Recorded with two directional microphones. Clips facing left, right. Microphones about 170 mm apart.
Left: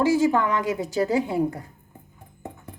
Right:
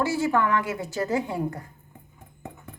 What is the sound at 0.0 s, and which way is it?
A woman's voice, 15° left (ahead or behind).